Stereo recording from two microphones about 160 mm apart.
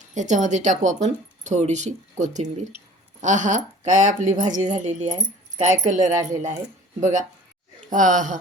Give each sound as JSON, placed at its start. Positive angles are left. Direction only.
{"t": 0.0, "sound": "speech", "side_deg": -50}